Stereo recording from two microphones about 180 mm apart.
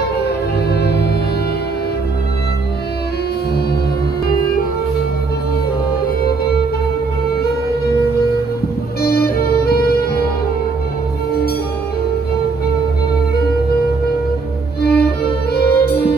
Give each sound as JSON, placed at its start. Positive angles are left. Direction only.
{"t": 0.2, "sound": "music", "side_deg": 65}
{"t": 9.0, "sound": "music", "side_deg": 60}
{"t": 14.8, "sound": "violin", "side_deg": 60}